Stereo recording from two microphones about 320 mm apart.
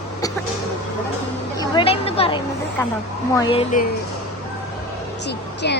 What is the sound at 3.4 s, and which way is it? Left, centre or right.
Speech, centre.